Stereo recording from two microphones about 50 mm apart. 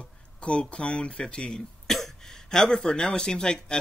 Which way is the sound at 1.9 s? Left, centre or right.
Centre.